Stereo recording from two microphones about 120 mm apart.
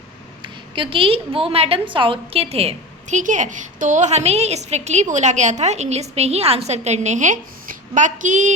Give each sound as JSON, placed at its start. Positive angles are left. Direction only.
{"t": 0.4, "sound": "a woman's voice", "side_deg": -45}